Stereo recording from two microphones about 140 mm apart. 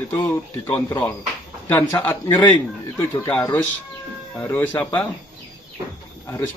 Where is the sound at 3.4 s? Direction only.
15° left (ahead or behind).